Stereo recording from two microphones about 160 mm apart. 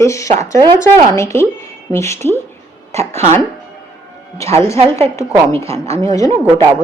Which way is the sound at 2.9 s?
15° left (ahead or behind).